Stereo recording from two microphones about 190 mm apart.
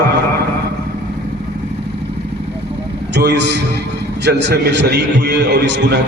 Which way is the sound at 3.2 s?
65° right (ahead or behind).